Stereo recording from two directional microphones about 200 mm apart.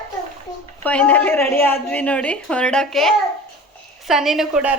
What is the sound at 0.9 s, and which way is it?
A woman's voice, 5° left (ahead or behind).